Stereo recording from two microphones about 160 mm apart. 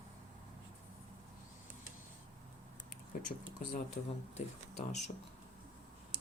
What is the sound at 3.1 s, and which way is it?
Speech, 60° left (ahead or behind).